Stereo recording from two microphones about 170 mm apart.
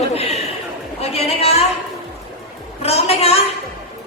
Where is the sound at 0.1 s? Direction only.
35° left (ahead or behind).